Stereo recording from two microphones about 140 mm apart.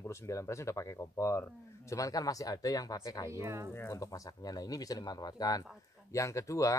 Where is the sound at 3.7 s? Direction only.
20° left (ahead or behind).